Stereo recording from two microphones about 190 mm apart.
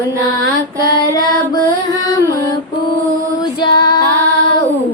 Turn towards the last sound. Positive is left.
turn(degrees=20)  # may be behind; listen again after turning